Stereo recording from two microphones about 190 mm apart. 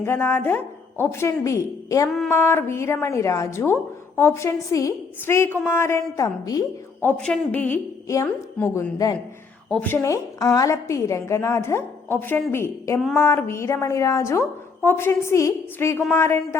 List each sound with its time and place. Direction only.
0.0 s a woman's voice: 10° left (ahead or behind)
2.0 s female singing: centre (ahead or behind)
2.3 s a woman's voice: 10° left (ahead or behind)
7.2 s a woman's voice: 5° left (ahead or behind)